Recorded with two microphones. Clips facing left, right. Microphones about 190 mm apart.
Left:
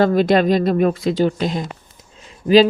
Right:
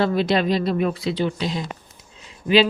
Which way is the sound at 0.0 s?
45° left (ahead or behind).